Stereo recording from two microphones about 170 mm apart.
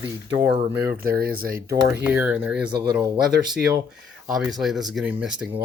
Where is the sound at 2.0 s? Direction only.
10° right (ahead or behind).